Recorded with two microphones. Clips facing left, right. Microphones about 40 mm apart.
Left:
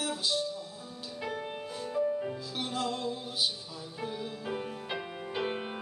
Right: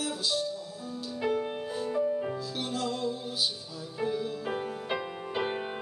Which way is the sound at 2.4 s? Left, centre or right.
Centre.